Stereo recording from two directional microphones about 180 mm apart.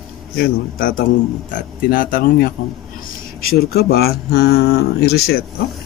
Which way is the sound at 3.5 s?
60° left (ahead or behind).